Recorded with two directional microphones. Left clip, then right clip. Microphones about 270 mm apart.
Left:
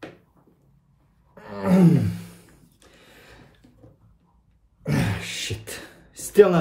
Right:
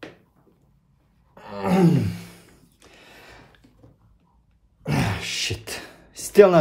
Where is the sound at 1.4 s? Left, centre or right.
Centre.